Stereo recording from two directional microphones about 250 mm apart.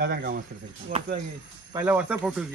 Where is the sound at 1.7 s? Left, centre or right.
Centre.